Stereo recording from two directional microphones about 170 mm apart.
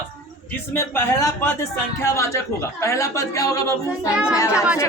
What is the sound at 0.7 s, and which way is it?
A man's voice, 15° left (ahead or behind).